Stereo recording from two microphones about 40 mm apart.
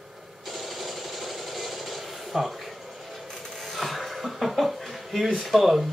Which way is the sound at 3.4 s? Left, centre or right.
Centre.